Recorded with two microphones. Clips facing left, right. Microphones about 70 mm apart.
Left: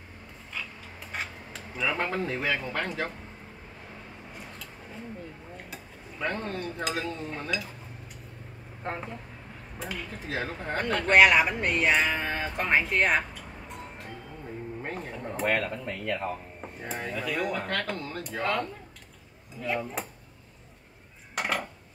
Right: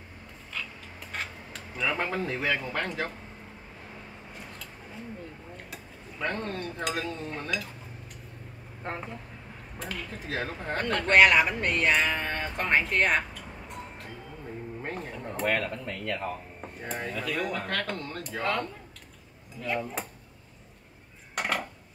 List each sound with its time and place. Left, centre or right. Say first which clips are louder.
1.1 s speech: left 1 dB; centre
4.3 s scissors: even; centre
5.6 s speech: left 1 dB; centre
8.8 s speech: left 1 dB; centre
21.4 s cutlery: even; centre